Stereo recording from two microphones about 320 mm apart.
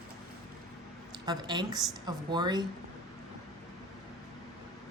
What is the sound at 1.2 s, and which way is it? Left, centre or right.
Speech, centre.